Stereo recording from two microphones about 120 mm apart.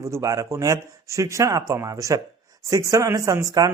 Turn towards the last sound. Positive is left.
turn(degrees=-30)  # may be behind; listen again after turning